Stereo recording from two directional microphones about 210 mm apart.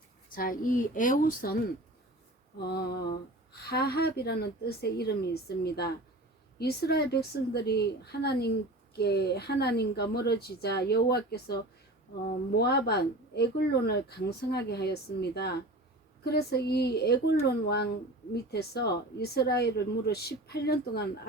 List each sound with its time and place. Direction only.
0.3 s a woman's voice: 40° left (ahead or behind)
2.6 s speech: 50° left (ahead or behind)
12.5 s speech: 50° left (ahead or behind)